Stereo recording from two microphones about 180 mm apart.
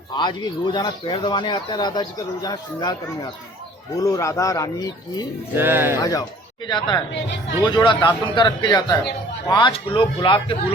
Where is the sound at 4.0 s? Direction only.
20° left (ahead or behind).